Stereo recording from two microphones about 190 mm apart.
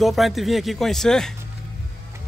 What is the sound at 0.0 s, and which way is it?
Speech, centre (ahead or behind).